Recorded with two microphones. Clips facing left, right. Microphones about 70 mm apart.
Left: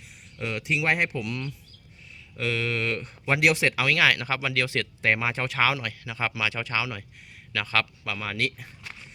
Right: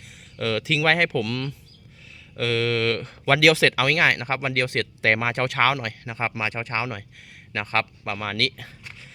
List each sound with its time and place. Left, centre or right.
0.0 s speech: right
2.4 s speech: right
6.1 s speech: right
8.4 s speech: right